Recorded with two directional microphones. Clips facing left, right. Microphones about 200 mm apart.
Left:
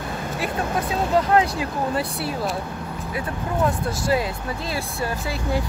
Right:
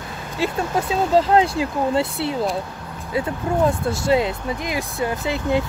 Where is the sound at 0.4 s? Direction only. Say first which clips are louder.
Right 4 dB; 25° right (ahead or behind).